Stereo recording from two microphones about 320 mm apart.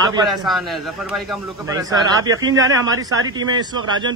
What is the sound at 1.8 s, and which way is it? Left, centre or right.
Speech, centre.